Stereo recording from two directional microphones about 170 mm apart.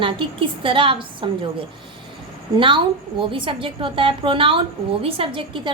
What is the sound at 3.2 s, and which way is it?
A woman's voice, 30° right (ahead or behind).